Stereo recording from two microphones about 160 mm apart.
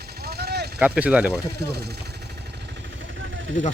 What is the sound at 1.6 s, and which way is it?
Speech, 85° right.